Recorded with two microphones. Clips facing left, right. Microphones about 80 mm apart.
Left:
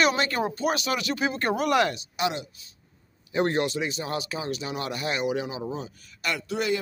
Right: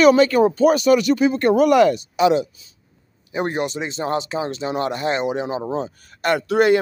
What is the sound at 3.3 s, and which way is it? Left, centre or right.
Speech, centre.